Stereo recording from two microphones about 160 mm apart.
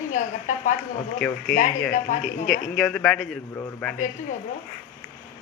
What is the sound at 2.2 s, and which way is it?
Speech, centre (ahead or behind).